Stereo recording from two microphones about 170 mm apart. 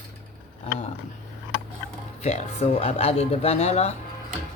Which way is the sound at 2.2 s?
35° left (ahead or behind).